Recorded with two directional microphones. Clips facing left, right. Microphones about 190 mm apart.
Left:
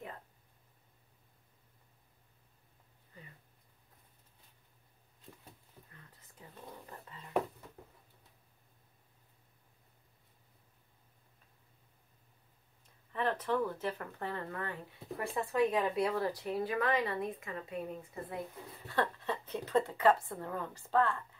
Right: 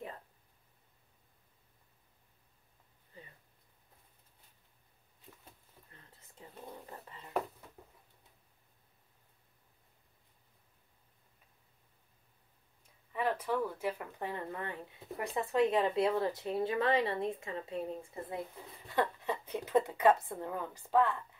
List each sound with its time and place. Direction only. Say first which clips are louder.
5.9 s whispering: left 1 dB; 25° right (ahead or behind)
13.1 s speech: even; 10° right (ahead or behind); by 18.4 s 25° right (ahead or behind)
18.9 s speech: right 1 dB; 15° right (ahead or behind)